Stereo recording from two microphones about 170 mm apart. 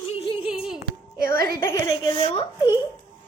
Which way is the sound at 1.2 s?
60° right (ahead or behind).